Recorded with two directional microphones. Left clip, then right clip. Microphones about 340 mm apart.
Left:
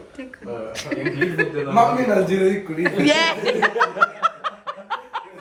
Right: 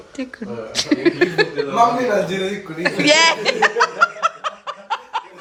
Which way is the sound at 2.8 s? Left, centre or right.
Centre.